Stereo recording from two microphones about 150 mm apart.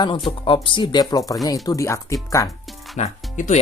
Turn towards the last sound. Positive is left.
turn(degrees=50)  # may be behind; listen again after turning